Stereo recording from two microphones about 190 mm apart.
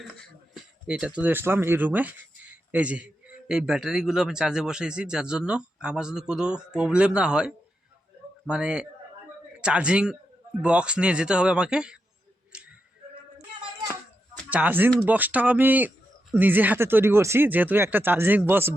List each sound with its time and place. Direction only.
0.0 s speech: centre (ahead or behind)
12.5 s a sound: 5° right (ahead or behind)
14.5 s speech: 10° right (ahead or behind)